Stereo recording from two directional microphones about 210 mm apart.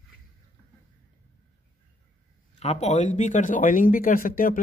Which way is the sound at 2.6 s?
30° left (ahead or behind).